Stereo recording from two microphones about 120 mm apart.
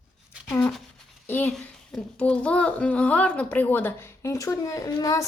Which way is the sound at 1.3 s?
15° left (ahead or behind).